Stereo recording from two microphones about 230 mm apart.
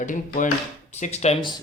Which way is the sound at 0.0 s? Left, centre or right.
Left.